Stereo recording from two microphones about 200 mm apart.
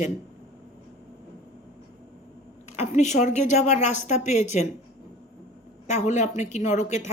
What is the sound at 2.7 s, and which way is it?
A woman's voice, 35° left (ahead or behind).